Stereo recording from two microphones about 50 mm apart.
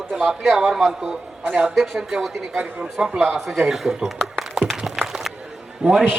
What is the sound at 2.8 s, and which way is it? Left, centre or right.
Speech, centre.